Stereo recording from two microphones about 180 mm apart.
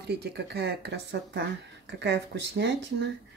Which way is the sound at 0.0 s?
65° right (ahead or behind).